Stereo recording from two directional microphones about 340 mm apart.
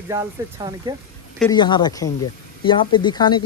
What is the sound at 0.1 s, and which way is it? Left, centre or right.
Speech, centre.